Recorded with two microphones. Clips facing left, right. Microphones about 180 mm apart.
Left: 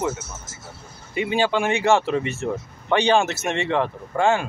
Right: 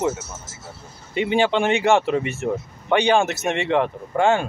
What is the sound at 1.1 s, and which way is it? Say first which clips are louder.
Speech: right 2 dB; 25° right (ahead or behind).